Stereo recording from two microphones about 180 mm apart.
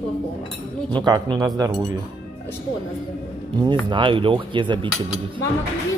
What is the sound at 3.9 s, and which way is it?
Speech, 25° right (ahead or behind).